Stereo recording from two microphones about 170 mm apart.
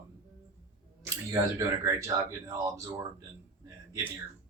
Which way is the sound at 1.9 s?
20° right (ahead or behind).